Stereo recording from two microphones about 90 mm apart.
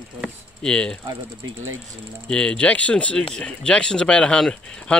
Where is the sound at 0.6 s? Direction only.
10° left (ahead or behind).